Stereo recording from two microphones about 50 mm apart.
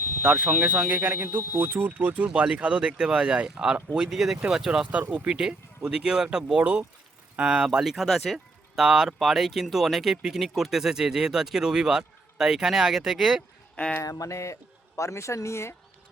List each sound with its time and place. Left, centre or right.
0.2 s speech: right
2.2 s speech: right
4.9 s speech: right
5.3 s speech: centre
7.9 s speech: centre
8.7 s speech: centre
13.7 s speech: left
14.0 s speech: left